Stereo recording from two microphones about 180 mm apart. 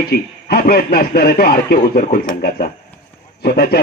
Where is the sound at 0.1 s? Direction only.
55° left (ahead or behind).